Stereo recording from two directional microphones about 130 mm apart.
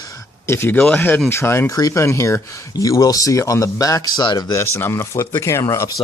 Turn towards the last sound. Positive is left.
turn(degrees=25)  # may be behind; listen again after turning